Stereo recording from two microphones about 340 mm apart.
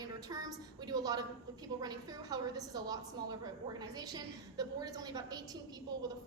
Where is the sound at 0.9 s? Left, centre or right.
Centre.